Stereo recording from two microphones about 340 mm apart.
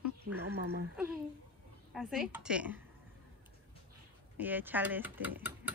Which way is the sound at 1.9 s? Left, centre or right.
Centre.